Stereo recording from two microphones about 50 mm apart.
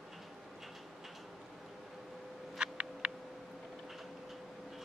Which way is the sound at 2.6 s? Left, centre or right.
Centre.